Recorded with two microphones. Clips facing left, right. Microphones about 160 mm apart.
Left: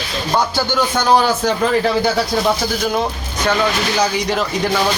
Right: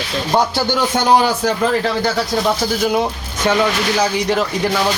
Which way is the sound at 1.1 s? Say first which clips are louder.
Even; 15° right (ahead or behind).